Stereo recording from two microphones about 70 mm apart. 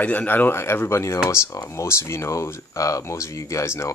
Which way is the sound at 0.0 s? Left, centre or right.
Left.